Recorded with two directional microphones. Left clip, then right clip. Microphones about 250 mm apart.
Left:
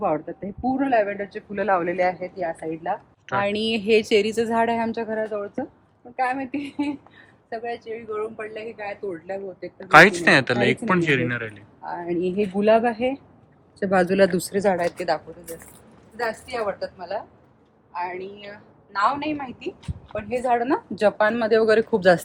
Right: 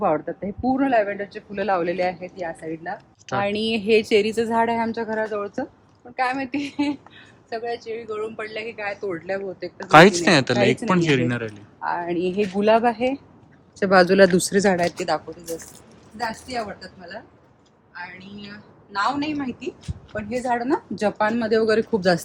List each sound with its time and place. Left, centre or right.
0.0 s speech: centre
3.2 s speech: centre
8.5 s a woman's voice: right
9.8 s speech: centre
13.7 s speech: right
17.9 s a woman's voice: left